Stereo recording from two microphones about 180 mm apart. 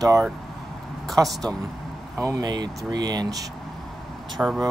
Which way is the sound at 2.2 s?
20° right (ahead or behind).